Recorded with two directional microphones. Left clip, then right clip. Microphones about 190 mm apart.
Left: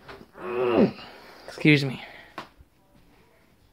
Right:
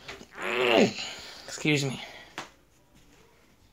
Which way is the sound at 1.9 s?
5° left (ahead or behind).